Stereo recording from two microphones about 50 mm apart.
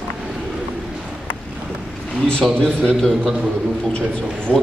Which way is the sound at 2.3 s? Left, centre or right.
Centre.